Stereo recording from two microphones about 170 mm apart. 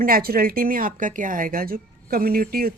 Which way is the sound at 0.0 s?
60° right (ahead or behind).